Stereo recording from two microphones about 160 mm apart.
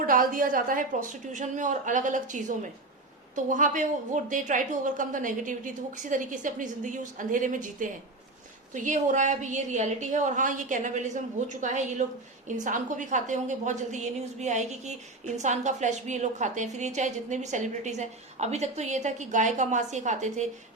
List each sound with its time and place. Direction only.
0.0 s a woman's voice: 60° right (ahead or behind)